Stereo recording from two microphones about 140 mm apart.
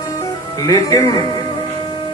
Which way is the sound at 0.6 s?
25° left (ahead or behind).